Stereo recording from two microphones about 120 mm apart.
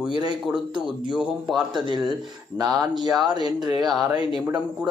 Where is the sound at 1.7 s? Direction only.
40° right (ahead or behind).